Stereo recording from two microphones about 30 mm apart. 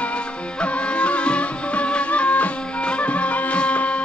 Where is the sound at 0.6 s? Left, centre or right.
Left.